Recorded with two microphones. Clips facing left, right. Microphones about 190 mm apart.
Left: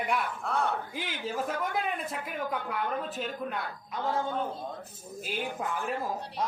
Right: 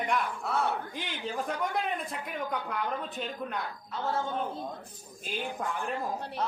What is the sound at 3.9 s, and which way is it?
Speech, 15° left (ahead or behind).